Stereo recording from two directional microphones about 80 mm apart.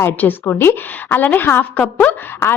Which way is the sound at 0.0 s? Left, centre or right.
Left.